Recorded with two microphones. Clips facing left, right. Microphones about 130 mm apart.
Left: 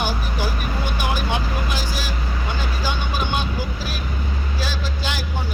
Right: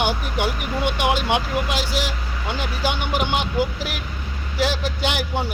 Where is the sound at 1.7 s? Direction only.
75° right (ahead or behind).